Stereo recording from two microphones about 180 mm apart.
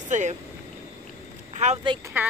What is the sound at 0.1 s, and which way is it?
Speech, 40° right (ahead or behind).